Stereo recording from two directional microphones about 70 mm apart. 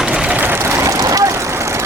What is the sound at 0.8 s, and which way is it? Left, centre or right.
Vehicle, right.